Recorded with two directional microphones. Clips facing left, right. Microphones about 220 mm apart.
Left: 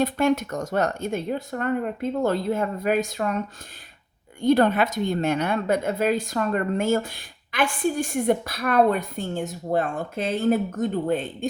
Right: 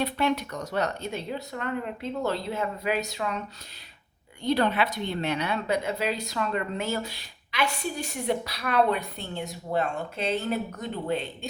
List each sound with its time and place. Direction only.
0.0 s a woman's voice: 45° left (ahead or behind)